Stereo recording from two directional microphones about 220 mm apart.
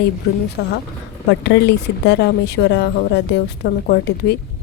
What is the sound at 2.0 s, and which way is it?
Speech, 50° left (ahead or behind).